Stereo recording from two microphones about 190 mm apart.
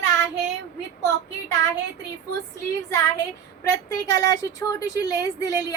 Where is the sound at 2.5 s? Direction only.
15° left (ahead or behind).